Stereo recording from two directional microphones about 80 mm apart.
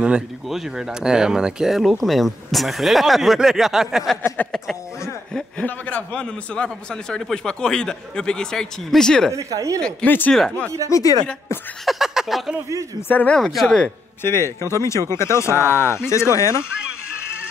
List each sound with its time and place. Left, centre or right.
0.0 s speech: centre
5.7 s speech: centre
9.3 s speech: right
10.0 s speech: left
10.3 s speech: centre
10.9 s speech: left
11.8 s speech: centre
14.2 s speech: left